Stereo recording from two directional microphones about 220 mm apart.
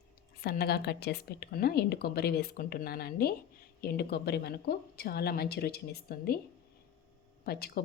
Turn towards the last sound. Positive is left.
turn(degrees=45)  # may be behind; listen again after turning